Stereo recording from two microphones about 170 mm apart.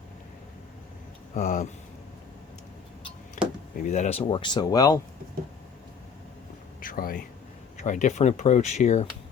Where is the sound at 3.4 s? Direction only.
50° left (ahead or behind).